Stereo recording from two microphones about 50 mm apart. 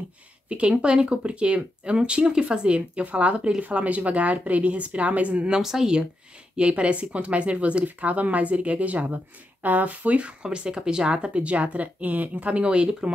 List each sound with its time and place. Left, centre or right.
0.5 s speech: right
5.6 s speech: centre